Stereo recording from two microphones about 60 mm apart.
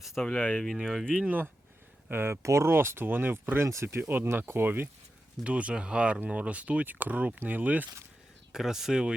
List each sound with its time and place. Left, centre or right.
0.0 s speech: centre
0.3 s speech: centre
0.6 s speech: centre
1.2 s speech: right
2.0 s speech: right
2.4 s speech: right
2.7 s speech: right
5.4 s speech: right
8.5 s speech: centre